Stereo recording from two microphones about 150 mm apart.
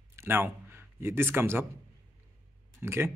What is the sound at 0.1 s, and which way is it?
A man's voice, 15° right (ahead or behind).